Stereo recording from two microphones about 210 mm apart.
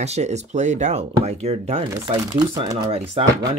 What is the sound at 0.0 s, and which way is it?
Speech, 30° right (ahead or behind).